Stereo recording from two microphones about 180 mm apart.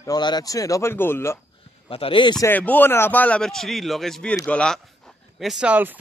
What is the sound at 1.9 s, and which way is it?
Speech, 30° left (ahead or behind).